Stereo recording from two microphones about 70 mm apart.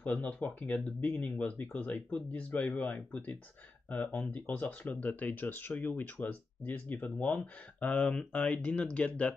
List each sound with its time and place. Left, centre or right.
0.0 s speech: left